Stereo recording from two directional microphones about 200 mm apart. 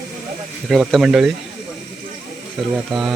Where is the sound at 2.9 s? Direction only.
Centre (ahead or behind).